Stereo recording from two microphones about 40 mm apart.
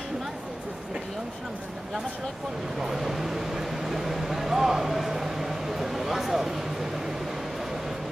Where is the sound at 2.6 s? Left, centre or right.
Centre.